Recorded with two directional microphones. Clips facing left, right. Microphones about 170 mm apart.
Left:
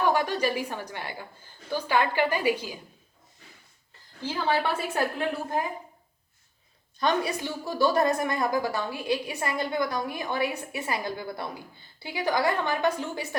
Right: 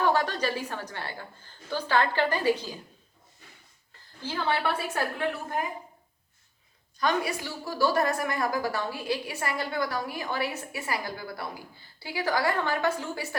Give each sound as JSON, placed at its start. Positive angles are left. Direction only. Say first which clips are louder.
{"t": 0.0, "sound": "a woman's voice", "louder": "left 1 dB", "side_deg": 15}
{"t": 4.2, "sound": "a woman's voice", "louder": "left 2 dB", "side_deg": 15}
{"t": 7.0, "sound": "a woman's voice", "louder": "left 1 dB", "side_deg": 20}